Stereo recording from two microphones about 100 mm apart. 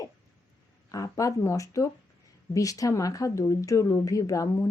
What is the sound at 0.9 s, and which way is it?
A woman's voice, 35° left (ahead or behind).